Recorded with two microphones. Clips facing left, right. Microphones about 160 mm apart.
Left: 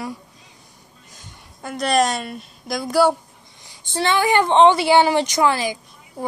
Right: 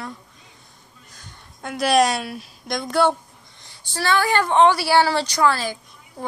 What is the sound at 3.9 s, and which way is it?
A woman's voice, 20° left (ahead or behind).